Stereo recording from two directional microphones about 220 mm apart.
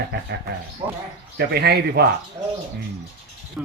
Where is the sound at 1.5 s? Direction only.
45° right (ahead or behind).